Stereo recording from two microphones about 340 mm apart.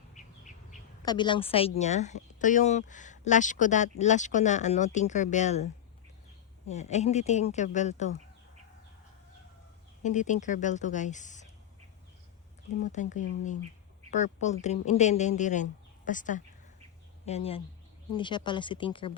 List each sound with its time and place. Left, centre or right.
0.1 s bird: left
1.0 s speech: centre
6.7 s speech: centre
10.0 s speech: left
12.8 s speech: left